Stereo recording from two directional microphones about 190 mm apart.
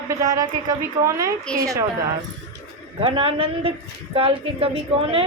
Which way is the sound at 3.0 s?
30° right (ahead or behind).